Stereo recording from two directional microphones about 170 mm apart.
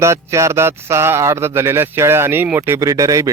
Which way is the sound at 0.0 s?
15° right (ahead or behind).